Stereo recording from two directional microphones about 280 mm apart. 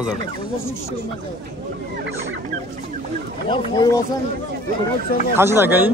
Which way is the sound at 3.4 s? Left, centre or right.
Centre.